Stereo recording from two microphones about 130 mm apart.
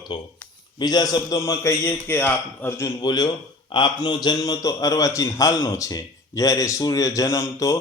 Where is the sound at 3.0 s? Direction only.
30° left (ahead or behind).